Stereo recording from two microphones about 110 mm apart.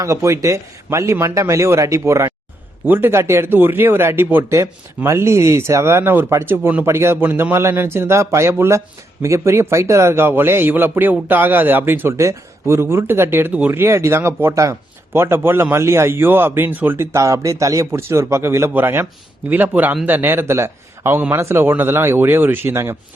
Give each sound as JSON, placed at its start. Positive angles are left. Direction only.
{"t": 0.0, "sound": "a man's voice", "side_deg": -25}